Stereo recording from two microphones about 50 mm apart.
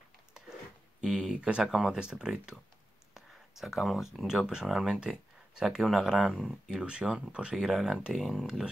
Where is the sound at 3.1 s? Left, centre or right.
Centre.